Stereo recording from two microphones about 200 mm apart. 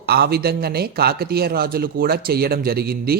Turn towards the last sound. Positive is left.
turn(degrees=-50)  # may be behind; listen again after turning